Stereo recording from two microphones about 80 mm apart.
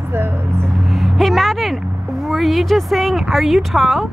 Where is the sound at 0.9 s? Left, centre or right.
Centre.